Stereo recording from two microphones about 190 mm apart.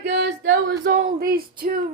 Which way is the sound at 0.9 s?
45° right (ahead or behind).